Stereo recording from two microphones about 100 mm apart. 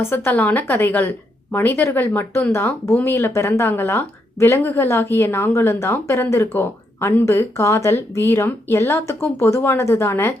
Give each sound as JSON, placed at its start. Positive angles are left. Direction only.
{"t": 0.0, "sound": "speech", "side_deg": 20}